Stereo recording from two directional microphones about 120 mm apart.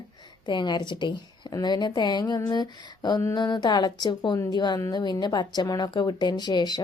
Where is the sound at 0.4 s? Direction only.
40° left (ahead or behind).